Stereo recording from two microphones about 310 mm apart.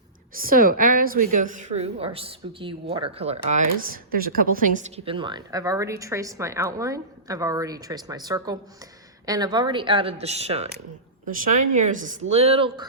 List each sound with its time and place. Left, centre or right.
0.3 s speech: right
11.7 s speech: right